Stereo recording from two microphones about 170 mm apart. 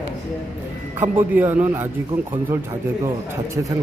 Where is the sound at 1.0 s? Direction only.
10° right (ahead or behind).